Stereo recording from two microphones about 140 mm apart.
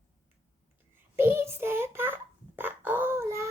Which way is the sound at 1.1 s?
15° right (ahead or behind).